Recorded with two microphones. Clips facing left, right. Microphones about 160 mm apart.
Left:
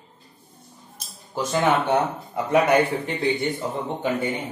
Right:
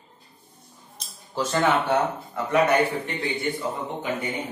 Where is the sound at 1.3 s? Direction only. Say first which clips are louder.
Left 1 dB; 15° left (ahead or behind).